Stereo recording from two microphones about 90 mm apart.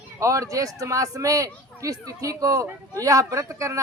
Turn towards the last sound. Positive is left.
turn(degrees=-35)  # may be behind; listen again after turning